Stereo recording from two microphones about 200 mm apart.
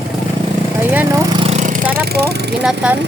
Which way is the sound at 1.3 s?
30° right (ahead or behind).